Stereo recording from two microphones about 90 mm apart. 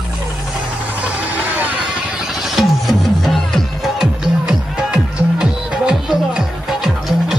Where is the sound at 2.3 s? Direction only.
Centre (ahead or behind).